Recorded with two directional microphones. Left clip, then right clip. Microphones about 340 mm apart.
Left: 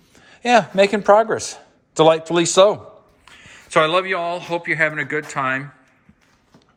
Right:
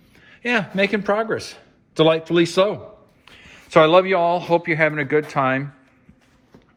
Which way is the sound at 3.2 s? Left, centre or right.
Centre.